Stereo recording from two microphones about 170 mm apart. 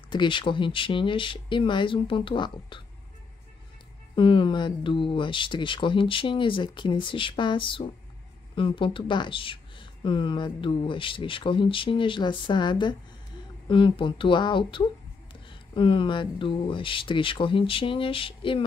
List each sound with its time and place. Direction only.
0.1 s speech: 30° left (ahead or behind)
4.1 s speech: 30° left (ahead or behind)